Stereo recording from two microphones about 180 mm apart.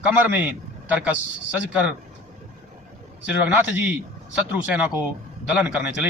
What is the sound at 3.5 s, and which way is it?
A man's voice, 10° right (ahead or behind).